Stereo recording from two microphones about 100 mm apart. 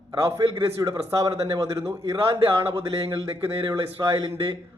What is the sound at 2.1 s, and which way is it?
Speech, 60° right (ahead or behind).